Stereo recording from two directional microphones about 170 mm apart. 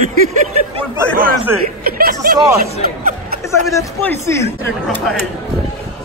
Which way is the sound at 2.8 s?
60° right (ahead or behind).